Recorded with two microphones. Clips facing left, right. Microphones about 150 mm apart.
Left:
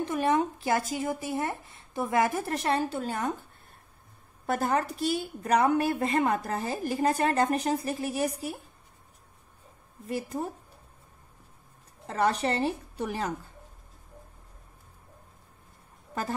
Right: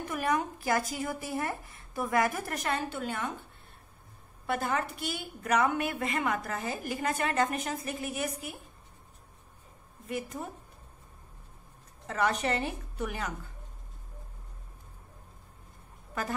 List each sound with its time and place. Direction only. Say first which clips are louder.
0.0 s speech: left 5 dB; 25° left (ahead or behind)
4.5 s a woman's voice: left 4 dB; 40° left (ahead or behind)
10.0 s a woman's voice: left 4 dB; 35° left (ahead or behind)
12.1 s a woman's voice: left 3 dB; 35° left (ahead or behind)